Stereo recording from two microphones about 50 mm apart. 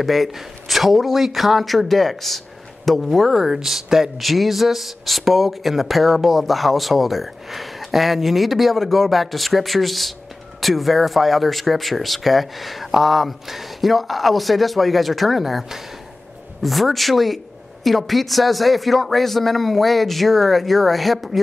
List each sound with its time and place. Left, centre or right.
0.0 s speech: centre